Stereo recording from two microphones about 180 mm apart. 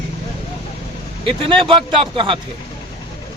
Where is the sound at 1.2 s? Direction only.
30° right (ahead or behind).